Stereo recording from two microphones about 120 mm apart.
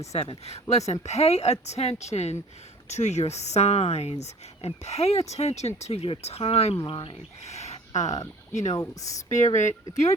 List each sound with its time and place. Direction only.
0.1 s speech: 60° left (ahead or behind)
6.8 s speech: 45° left (ahead or behind)
7.4 s a sound: 65° left (ahead or behind)
8.0 s speech: 30° left (ahead or behind)
9.6 s speech: 85° left